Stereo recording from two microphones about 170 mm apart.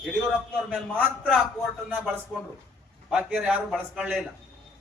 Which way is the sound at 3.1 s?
5° right (ahead or behind).